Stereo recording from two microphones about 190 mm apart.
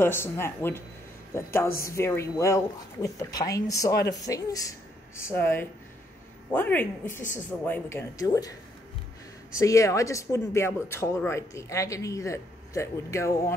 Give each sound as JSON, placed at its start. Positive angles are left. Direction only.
{"t": 0.0, "sound": "speech", "side_deg": 10}
{"t": 9.6, "sound": "speech", "side_deg": 15}